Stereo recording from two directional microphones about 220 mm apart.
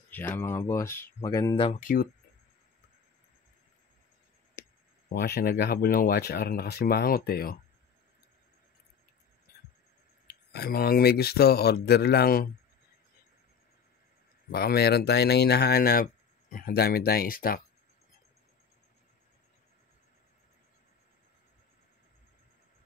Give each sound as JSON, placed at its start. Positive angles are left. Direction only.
{"t": 0.1, "sound": "speech", "side_deg": 10}
{"t": 1.8, "sound": "speech", "side_deg": 40}
{"t": 5.1, "sound": "speech", "side_deg": 45}
{"t": 9.5, "sound": "a sound", "side_deg": 40}
{"t": 10.2, "sound": "speech", "side_deg": 45}
{"t": 14.5, "sound": "speech", "side_deg": 45}